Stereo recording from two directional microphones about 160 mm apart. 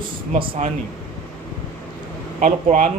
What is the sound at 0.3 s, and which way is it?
Speech, 35° right (ahead or behind).